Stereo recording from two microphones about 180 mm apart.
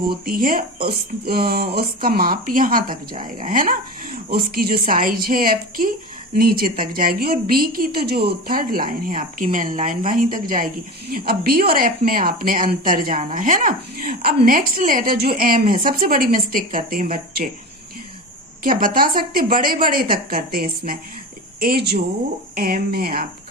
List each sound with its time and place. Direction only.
0.1 s speech: 55° right (ahead or behind)
18.6 s speech: 50° right (ahead or behind)